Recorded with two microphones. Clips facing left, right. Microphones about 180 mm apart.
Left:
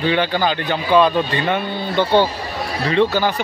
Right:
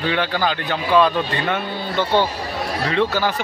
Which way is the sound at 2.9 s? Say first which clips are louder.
Left 4 dB; centre (ahead or behind).